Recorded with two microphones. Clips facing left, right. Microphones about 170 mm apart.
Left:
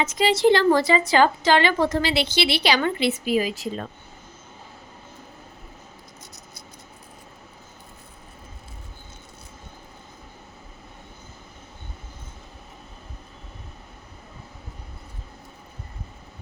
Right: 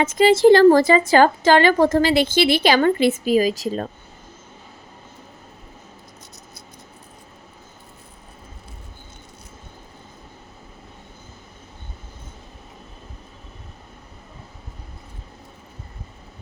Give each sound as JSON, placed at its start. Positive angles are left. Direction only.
{"t": 0.0, "sound": "a woman's voice", "side_deg": -55}